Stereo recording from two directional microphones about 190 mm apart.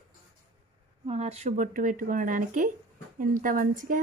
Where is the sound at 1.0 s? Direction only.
35° right (ahead or behind).